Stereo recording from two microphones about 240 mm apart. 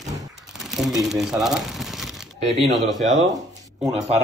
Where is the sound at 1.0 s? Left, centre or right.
Centre.